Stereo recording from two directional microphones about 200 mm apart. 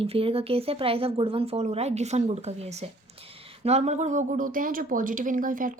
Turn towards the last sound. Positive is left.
turn(degrees=-40)  # may be behind; listen again after turning